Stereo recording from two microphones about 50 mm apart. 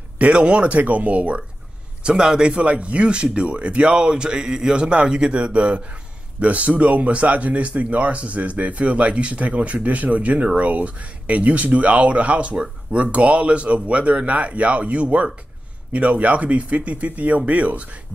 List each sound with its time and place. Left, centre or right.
0.2 s speech: right
2.0 s speech: centre